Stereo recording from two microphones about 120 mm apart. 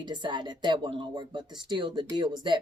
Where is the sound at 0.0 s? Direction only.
40° right (ahead or behind).